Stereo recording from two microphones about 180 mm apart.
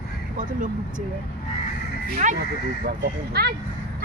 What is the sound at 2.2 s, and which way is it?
Speech, 45° right (ahead or behind).